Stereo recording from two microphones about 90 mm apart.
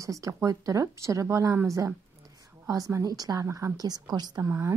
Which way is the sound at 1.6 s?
35° right (ahead or behind).